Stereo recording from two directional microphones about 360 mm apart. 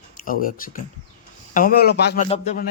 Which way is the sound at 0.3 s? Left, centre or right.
Left.